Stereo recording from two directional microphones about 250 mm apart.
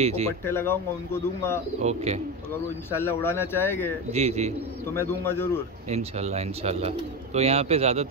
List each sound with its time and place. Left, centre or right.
0.0 s speech: right
0.5 s speech: centre
1.8 s speech: right
3.0 s speech: centre
4.1 s speech: right
4.9 s speech: centre
5.9 s speech: right